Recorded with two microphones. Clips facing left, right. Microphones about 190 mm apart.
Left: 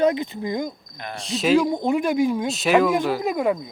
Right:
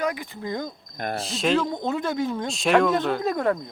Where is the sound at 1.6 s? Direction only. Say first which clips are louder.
Left 5 dB; 15° left (ahead or behind).